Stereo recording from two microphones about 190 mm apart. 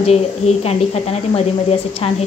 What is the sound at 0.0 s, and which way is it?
Speech, 35° left (ahead or behind).